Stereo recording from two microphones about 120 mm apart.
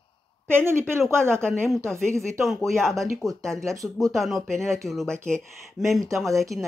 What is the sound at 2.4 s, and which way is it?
Speech, centre (ahead or behind).